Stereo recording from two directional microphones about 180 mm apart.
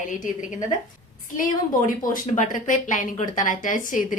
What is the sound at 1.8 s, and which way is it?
Speech, 45° left (ahead or behind).